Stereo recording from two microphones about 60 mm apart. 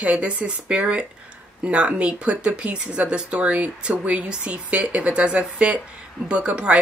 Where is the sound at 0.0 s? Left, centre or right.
Right.